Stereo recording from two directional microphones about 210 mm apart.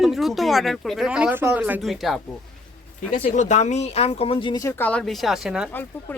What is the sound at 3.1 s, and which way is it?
Speech, 35° left (ahead or behind).